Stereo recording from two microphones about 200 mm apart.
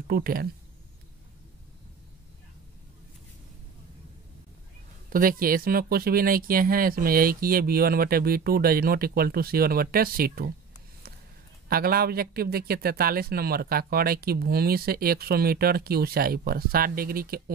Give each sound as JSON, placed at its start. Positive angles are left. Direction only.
{"t": 0.0, "sound": "speech", "side_deg": -50}
{"t": 5.1, "sound": "speech", "side_deg": -45}
{"t": 11.7, "sound": "speech", "side_deg": -50}